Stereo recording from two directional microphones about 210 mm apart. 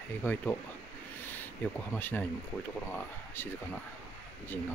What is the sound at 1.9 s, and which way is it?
Speech, 10° left (ahead or behind).